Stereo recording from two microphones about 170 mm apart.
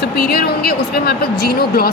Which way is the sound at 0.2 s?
65° left (ahead or behind).